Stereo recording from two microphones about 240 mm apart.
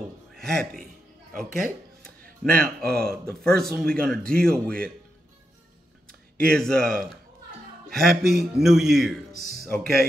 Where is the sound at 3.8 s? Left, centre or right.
Centre.